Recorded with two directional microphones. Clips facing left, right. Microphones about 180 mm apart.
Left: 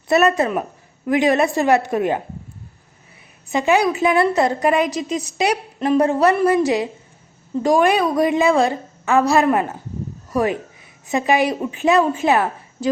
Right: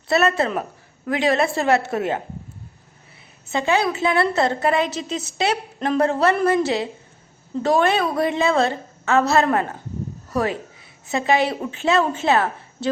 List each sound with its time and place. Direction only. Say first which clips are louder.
0.1 s a woman's voice: left 3 dB; 15° left (ahead or behind)
3.5 s a woman's voice: left 3 dB; 15° left (ahead or behind)